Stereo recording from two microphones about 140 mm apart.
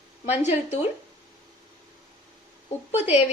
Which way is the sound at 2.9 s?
55° left (ahead or behind).